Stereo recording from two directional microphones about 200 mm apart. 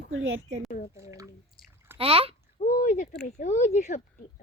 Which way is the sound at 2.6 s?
40° left (ahead or behind).